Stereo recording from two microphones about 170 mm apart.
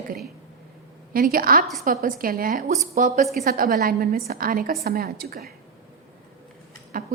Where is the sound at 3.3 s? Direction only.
55° right (ahead or behind).